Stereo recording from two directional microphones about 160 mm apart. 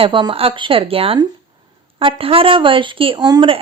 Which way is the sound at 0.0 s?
30° right (ahead or behind).